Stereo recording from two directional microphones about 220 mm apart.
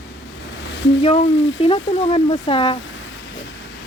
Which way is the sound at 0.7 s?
50° left (ahead or behind).